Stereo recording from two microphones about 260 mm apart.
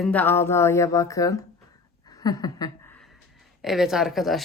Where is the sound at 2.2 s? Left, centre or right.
Centre.